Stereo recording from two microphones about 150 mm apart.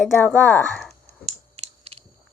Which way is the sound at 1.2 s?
45° right (ahead or behind).